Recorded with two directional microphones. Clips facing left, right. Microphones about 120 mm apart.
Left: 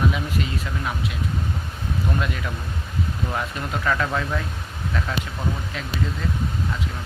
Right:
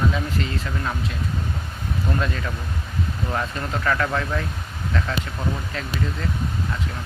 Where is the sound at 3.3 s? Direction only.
10° left (ahead or behind).